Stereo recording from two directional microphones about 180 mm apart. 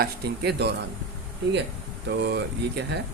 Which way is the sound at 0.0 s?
65° right (ahead or behind).